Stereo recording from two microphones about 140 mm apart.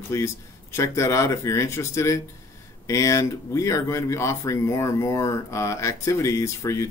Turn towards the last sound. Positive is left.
turn(degrees=20)  # may be behind; listen again after turning